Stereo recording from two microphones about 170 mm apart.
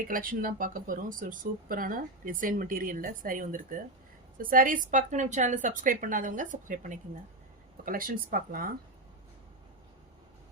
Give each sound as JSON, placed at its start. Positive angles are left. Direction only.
{"t": 0.1, "sound": "speech", "side_deg": -55}